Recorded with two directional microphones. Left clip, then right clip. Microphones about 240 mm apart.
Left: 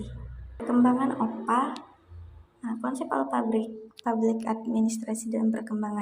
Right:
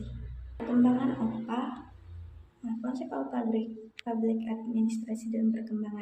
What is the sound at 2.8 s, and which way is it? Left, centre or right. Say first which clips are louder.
Speech: left 7 dB; centre.